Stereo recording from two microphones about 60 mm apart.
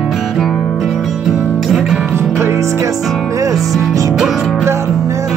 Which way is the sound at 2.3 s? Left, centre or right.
Right.